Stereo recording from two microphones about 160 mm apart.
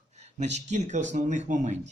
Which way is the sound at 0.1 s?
45° right (ahead or behind).